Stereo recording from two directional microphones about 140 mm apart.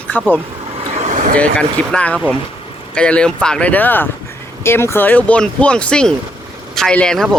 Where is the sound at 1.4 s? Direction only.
10° left (ahead or behind).